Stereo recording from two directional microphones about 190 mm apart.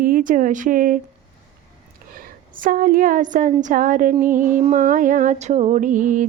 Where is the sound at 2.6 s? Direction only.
45° right (ahead or behind).